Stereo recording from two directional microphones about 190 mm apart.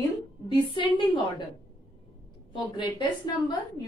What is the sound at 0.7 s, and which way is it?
Speech, 25° left (ahead or behind).